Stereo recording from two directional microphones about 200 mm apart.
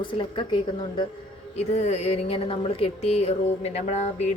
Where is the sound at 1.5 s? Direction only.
35° left (ahead or behind).